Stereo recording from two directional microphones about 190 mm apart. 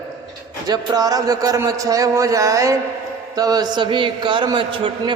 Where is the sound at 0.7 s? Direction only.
20° right (ahead or behind).